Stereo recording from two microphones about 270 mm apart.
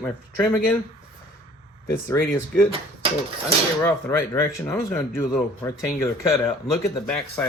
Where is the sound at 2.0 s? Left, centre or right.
Centre.